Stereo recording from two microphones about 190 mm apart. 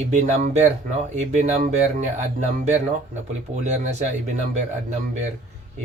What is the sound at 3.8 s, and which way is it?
Speech, 35° right (ahead or behind).